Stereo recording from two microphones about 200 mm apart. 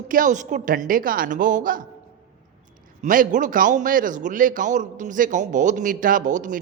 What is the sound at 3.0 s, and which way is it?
Speech, 40° right (ahead or behind).